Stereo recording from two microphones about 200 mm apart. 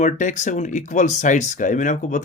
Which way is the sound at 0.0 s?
35° left (ahead or behind).